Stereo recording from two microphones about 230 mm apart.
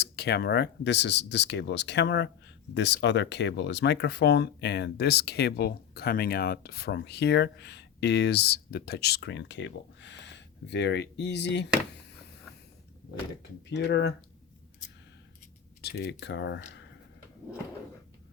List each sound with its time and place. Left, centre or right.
0.0 s speech: left
13.7 s speech: left
15.8 s speech: left